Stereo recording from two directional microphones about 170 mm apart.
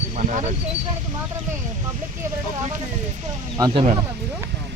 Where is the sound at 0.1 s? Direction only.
45° right (ahead or behind).